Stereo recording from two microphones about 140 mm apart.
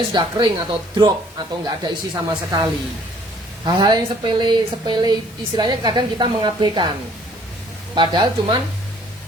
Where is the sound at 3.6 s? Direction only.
30° right (ahead or behind).